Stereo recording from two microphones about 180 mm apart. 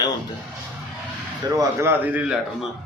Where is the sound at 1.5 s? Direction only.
15° right (ahead or behind).